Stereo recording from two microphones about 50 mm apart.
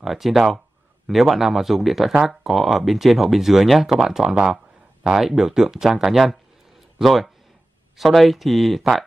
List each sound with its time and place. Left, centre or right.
0.0 s speech: centre